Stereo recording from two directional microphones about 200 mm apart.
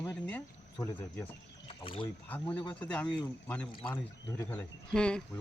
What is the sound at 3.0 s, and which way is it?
Speech, 20° left (ahead or behind).